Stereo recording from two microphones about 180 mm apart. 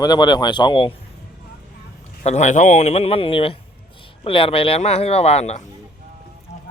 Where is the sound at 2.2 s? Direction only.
40° left (ahead or behind).